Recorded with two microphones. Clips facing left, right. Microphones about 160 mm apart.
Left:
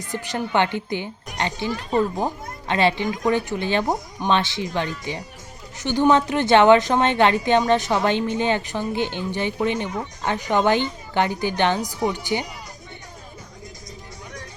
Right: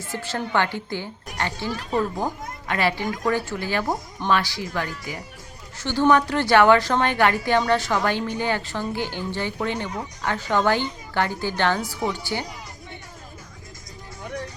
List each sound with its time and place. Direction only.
0.0 s a woman's voice: 15° left (ahead or behind)